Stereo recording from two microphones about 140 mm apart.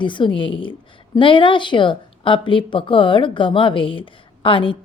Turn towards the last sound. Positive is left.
turn(degrees=40)  # may be behind; listen again after turning